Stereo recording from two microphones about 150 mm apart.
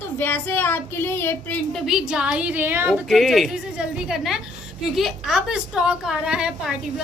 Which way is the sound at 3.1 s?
Centre (ahead or behind).